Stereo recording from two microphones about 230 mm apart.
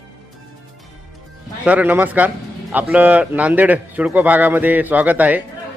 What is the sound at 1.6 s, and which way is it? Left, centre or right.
A man's voice, centre.